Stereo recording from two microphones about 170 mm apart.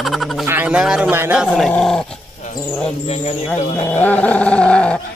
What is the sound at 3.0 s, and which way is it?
Speech, 40° left (ahead or behind).